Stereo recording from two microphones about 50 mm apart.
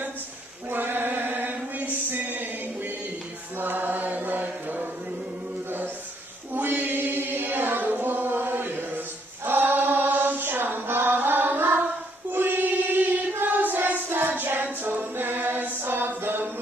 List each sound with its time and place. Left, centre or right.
0.7 s a sound: right
3.5 s mantra: right
6.5 s chant: right
12.3 s choir: right
13.4 s child singing: right